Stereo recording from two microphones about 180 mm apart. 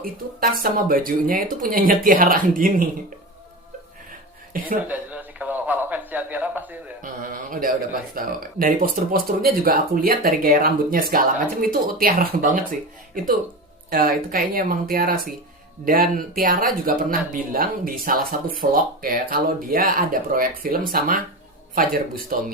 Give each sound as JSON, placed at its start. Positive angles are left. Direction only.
{"t": 0.0, "sound": "speech", "side_deg": -55}
{"t": 4.5, "sound": "speech", "side_deg": -50}
{"t": 4.9, "sound": "a sound", "side_deg": -10}
{"t": 7.0, "sound": "a sound", "side_deg": -50}
{"t": 8.1, "sound": "speech", "side_deg": -50}
{"t": 13.9, "sound": "speech", "side_deg": -55}